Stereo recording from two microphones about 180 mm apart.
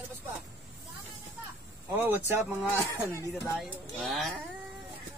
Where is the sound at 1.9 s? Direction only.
10° right (ahead or behind).